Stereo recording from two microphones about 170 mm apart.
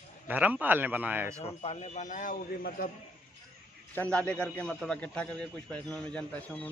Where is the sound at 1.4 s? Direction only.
35° left (ahead or behind); by 2.9 s 55° left (ahead or behind).